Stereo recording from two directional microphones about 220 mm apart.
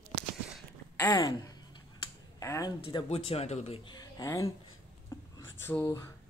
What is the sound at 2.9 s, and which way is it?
Speech, 25° left (ahead or behind).